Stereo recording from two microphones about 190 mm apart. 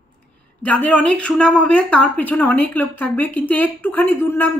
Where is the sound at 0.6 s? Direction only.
5° left (ahead or behind).